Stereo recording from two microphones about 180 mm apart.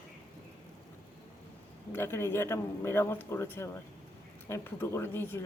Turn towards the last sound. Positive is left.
turn(degrees=10)  # may be behind; listen again after turning